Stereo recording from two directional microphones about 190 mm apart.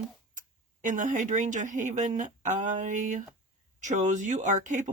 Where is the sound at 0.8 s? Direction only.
40° right (ahead or behind).